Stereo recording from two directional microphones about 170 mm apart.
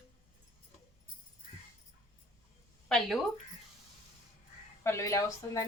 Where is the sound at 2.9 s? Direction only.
Centre (ahead or behind).